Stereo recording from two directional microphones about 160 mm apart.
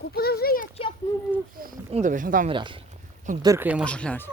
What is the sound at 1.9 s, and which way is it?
Speech, 50° right (ahead or behind).